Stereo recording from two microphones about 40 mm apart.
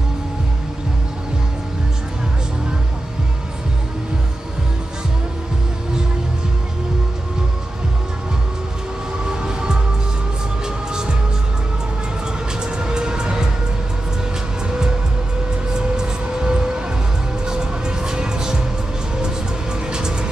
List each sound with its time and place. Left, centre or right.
9.3 s music: centre
10.9 s music: right
12.5 s music: centre
15.7 s music: centre
19.9 s music: right